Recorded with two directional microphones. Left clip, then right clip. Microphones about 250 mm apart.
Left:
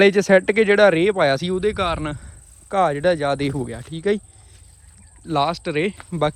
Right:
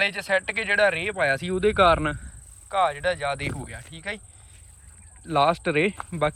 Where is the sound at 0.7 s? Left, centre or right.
Left; by 2.1 s centre.